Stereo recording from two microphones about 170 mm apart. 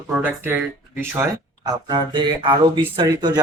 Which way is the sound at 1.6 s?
25° right (ahead or behind).